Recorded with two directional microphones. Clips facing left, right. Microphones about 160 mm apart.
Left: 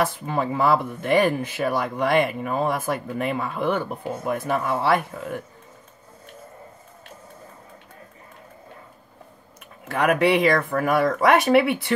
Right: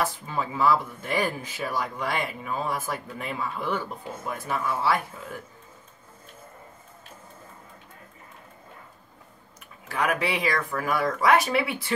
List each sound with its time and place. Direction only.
0.0 s speech: 60° left (ahead or behind)
9.8 s speech: 60° left (ahead or behind)